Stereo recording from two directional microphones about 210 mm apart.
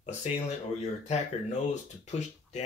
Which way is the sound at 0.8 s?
30° left (ahead or behind).